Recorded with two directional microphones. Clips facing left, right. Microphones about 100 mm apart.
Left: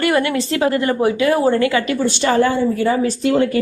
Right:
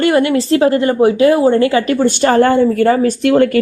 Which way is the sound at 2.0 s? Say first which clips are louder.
Right 5 dB; 50° right (ahead or behind).